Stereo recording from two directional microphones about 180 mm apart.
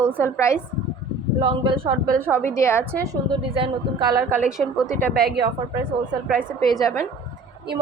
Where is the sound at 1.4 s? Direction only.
25° right (ahead or behind).